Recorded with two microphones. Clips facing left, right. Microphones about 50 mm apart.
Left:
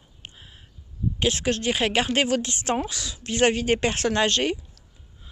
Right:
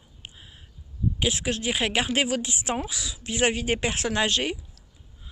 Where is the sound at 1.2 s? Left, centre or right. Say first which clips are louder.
Left 4 dB; centre.